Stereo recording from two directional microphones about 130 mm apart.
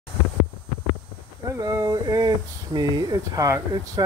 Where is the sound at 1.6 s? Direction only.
25° right (ahead or behind).